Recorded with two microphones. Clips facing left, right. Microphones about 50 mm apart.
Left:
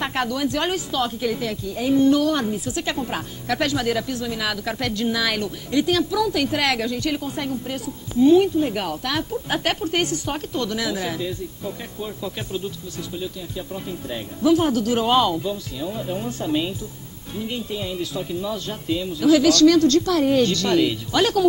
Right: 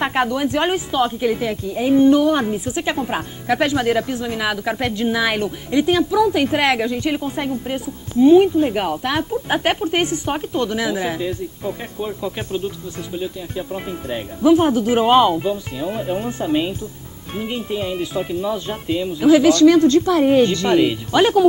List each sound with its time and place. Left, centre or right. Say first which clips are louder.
0.0 s speech: right 4 dB; right